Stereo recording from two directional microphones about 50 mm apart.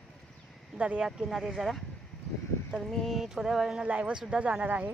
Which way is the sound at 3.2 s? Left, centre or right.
Centre.